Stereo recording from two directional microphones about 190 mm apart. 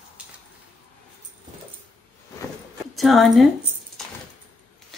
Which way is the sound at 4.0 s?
Centre (ahead or behind).